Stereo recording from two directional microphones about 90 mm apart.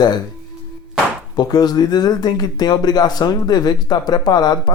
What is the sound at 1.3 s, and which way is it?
Speech, 50° left (ahead or behind).